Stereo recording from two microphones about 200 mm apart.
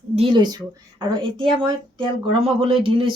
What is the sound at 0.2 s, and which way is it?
Speech, 25° right (ahead or behind).